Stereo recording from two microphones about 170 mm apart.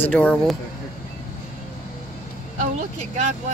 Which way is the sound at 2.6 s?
45° right (ahead or behind).